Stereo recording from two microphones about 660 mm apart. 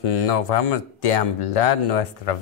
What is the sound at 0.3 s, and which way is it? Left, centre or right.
Speech, left.